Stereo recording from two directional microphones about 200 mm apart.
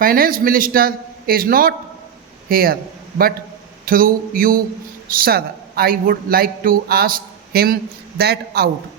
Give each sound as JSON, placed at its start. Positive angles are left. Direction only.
{"t": 0.0, "sound": "a woman's voice", "side_deg": -45}
{"t": 3.8, "sound": "a woman's voice", "side_deg": -45}